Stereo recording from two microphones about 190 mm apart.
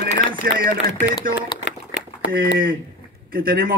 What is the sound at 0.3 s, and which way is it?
Speech, 50° right (ahead or behind).